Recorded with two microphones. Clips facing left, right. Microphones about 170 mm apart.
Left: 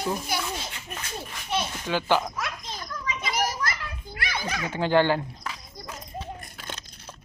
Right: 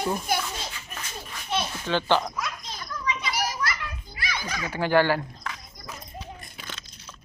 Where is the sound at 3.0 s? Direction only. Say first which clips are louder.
Left 1 dB; 50° left (ahead or behind).